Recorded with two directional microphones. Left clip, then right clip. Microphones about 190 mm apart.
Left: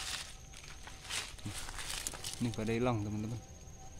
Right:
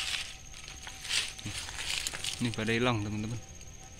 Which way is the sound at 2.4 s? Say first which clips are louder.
Right 4 dB; 5° right (ahead or behind).